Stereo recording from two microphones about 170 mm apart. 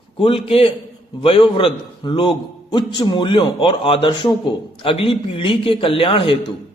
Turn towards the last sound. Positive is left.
turn(degrees=30)  # may be behind; listen again after turning